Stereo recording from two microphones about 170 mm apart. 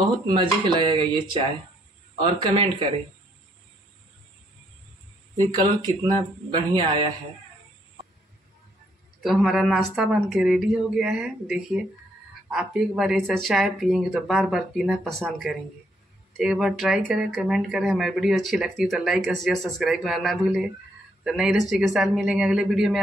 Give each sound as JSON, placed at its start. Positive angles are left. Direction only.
{"t": 0.0, "sound": "speech", "side_deg": -30}
{"t": 5.5, "sound": "speech", "side_deg": -25}
{"t": 9.2, "sound": "speech", "side_deg": 0}
{"t": 16.3, "sound": "speech", "side_deg": -5}